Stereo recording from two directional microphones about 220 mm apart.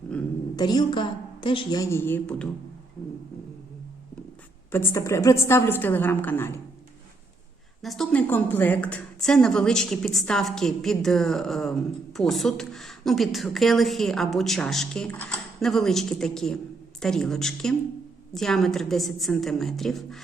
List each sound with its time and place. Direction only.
0.5 s a woman's voice: 20° left (ahead or behind)
4.7 s a woman's voice: 10° left (ahead or behind)
7.8 s a woman's voice: centre (ahead or behind)